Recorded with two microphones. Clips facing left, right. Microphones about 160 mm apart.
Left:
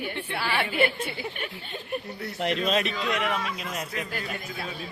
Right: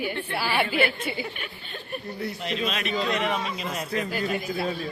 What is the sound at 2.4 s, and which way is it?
Speech, 60° left (ahead or behind).